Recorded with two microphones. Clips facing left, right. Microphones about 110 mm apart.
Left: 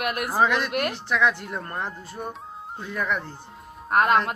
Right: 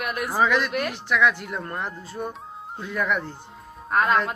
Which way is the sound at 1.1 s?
20° left (ahead or behind).